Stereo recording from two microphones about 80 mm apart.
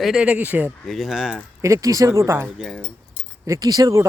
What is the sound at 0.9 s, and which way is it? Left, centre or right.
Speech, centre.